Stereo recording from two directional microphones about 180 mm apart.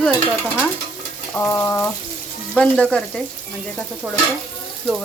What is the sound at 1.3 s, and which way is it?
Speech, 15° left (ahead or behind).